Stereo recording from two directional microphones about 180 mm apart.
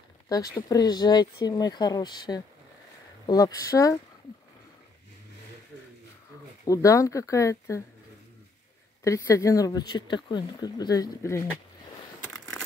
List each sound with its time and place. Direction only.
0.3 s speech: 20° left (ahead or behind)
6.7 s speech: 20° left (ahead or behind)
9.0 s speech: 15° left (ahead or behind)
12.3 s a sound: 5° left (ahead or behind)